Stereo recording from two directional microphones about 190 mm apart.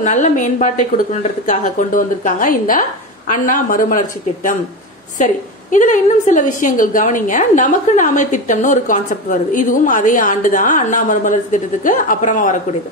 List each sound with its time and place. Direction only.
0.0 s a woman's voice: 40° left (ahead or behind)